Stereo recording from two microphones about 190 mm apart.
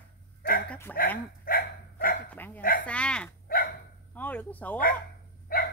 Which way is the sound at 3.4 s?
50° left (ahead or behind).